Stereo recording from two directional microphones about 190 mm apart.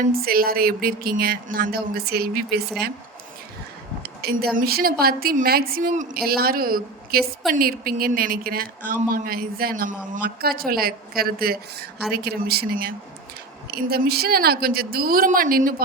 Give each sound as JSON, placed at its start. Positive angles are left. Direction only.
{"t": 0.0, "sound": "a woman's voice", "side_deg": -50}
{"t": 4.0, "sound": "a woman's voice", "side_deg": -55}